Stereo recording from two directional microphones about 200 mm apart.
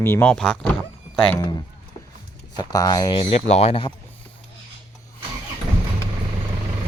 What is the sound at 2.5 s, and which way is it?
Speech, 20° left (ahead or behind).